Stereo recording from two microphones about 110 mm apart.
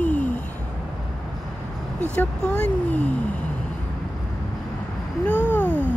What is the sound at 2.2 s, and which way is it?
Speech, 15° left (ahead or behind).